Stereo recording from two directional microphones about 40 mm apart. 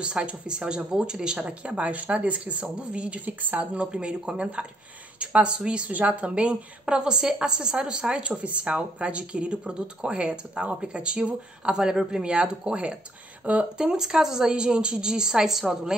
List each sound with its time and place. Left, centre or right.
0.0 s a woman's voice: right
3.3 s speech: right
3.7 s a woman's voice: right
5.9 s a woman's voice: right
6.2 s a woman's voice: right
13.7 s a woman's voice: centre